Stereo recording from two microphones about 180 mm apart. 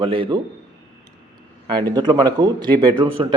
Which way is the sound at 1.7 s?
25° right (ahead or behind).